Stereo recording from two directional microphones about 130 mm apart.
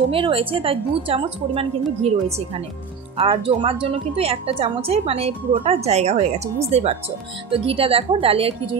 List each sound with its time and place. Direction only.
0.1 s a woman's voice: 45° right (ahead or behind)